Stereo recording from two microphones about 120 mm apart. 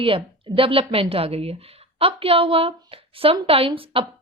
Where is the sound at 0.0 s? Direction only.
50° right (ahead or behind).